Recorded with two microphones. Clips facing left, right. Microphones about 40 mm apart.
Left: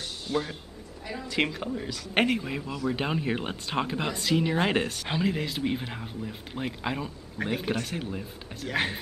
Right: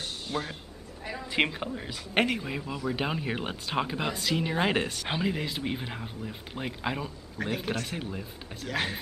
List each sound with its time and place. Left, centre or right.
0.3 s a woman's voice: centre
2.3 s speech: centre
8.6 s speech: centre